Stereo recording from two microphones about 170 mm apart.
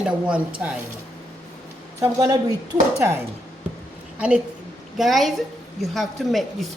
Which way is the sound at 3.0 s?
15° right (ahead or behind).